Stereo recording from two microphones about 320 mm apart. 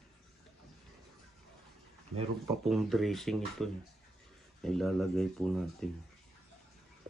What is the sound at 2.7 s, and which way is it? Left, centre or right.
Speech, centre.